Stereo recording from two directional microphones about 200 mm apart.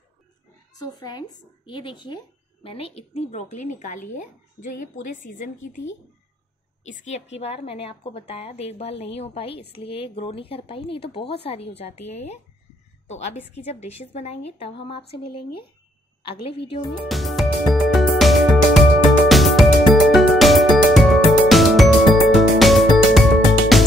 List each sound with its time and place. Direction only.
0.7 s a woman's voice: 20° left (ahead or behind); by 5.7 s 40° left (ahead or behind)
7.0 s a woman's voice: 35° left (ahead or behind)
16.9 s music: centre (ahead or behind)